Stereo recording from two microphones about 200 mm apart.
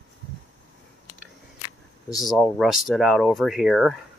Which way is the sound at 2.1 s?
Centre (ahead or behind).